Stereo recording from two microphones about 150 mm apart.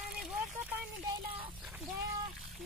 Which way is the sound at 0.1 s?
Centre (ahead or behind).